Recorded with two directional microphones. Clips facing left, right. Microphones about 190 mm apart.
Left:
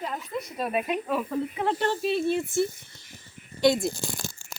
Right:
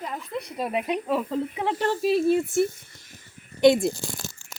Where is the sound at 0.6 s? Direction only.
20° right (ahead or behind).